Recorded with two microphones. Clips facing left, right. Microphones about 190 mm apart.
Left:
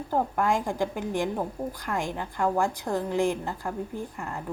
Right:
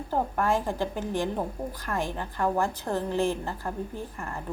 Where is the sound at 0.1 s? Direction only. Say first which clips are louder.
Left 1 dB; 15° left (ahead or behind).